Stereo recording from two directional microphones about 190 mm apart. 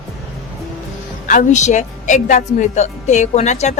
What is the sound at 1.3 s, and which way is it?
A woman's voice, 40° left (ahead or behind).